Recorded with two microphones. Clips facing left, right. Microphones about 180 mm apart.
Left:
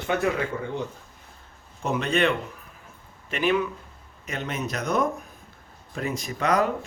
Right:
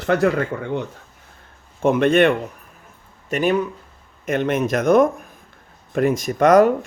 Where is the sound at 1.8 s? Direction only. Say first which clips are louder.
Right 9 dB; 55° right (ahead or behind).